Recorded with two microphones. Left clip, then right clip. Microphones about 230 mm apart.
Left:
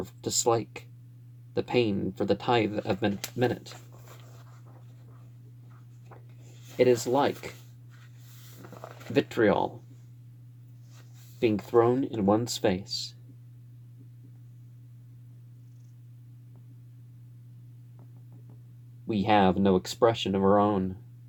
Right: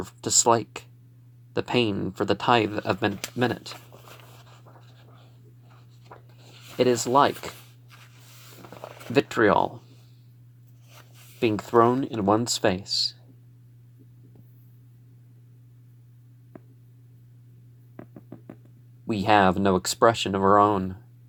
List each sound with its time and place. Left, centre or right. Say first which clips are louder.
0.0 s speech: right 5 dB; centre
6.7 s speech: right 3 dB; centre
8.6 s a sound: right 4 dB; right
11.3 s speech: right 3 dB; centre
19.0 s speech: right 4 dB; centre